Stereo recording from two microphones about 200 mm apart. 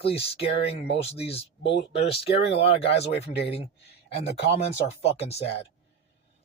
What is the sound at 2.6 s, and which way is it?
Speech, 30° left (ahead or behind).